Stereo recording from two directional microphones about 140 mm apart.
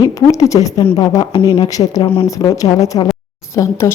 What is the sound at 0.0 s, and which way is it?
A woman's voice, 25° left (ahead or behind).